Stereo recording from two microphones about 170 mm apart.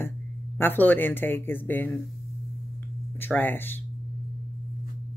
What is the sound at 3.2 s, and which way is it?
Speech, 10° left (ahead or behind).